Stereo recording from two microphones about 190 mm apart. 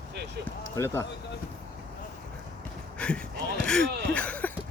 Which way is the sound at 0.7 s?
15° left (ahead or behind).